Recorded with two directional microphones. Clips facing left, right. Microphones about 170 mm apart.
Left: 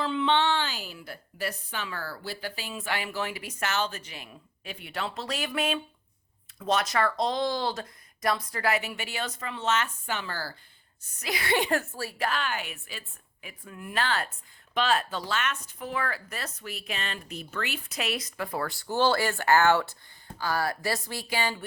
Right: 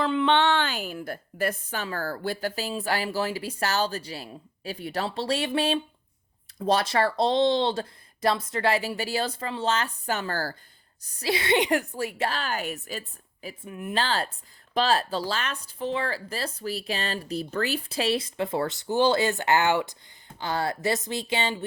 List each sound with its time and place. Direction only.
0.0 s a woman's voice: 55° right (ahead or behind)
11.2 s a woman's voice: 30° right (ahead or behind)
13.7 s speech: 20° right (ahead or behind)